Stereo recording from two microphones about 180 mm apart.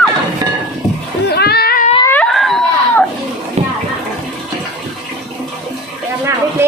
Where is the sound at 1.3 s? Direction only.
60° left (ahead or behind).